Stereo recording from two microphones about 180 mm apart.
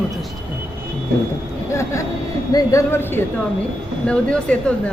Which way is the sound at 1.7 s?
15° left (ahead or behind).